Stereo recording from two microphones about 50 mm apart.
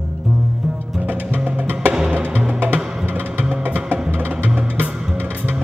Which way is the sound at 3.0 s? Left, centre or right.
Right.